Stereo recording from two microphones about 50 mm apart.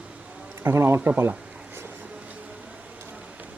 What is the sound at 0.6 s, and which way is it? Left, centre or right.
Speech, right.